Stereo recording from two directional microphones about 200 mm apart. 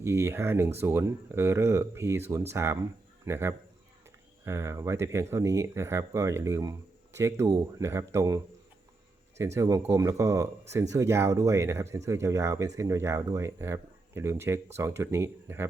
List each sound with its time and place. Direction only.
0.0 s speech: 15° right (ahead or behind)
9.6 s speech: 15° right (ahead or behind)